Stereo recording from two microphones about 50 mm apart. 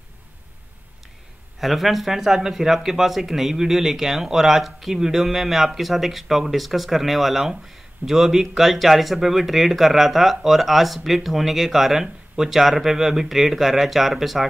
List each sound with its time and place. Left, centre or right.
1.6 s speech: centre